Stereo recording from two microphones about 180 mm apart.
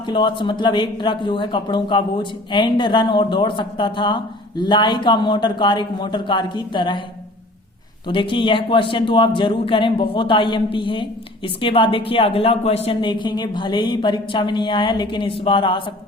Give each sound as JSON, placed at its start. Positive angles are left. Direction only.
{"t": 0.0, "sound": "a man's voice", "side_deg": 25}
{"t": 8.0, "sound": "a man's voice", "side_deg": 25}